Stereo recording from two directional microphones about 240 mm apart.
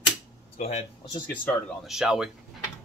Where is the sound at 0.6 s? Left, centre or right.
Left.